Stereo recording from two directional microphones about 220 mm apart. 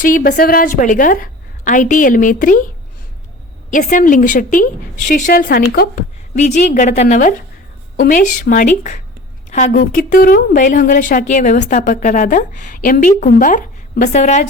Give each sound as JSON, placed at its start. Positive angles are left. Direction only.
{"t": 0.0, "sound": "a woman's voice", "side_deg": 40}
{"t": 3.7, "sound": "a woman's voice", "side_deg": 35}